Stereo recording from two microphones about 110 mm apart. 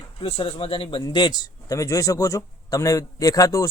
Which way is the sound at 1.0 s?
40° left (ahead or behind).